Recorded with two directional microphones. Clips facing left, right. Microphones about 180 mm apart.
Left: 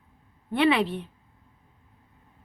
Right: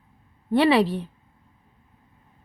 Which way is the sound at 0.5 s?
35° right (ahead or behind).